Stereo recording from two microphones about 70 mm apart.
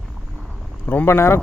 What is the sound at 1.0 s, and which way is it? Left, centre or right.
Speech, left.